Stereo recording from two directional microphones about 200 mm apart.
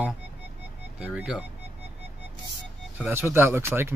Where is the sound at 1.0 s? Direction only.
5° right (ahead or behind).